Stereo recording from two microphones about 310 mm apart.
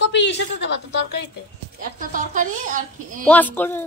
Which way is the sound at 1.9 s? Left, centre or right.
Right.